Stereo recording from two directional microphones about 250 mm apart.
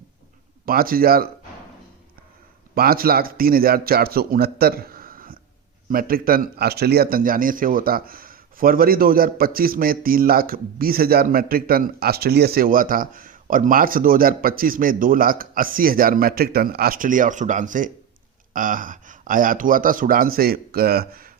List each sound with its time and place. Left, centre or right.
0.6 s speech: right
2.7 s speech: right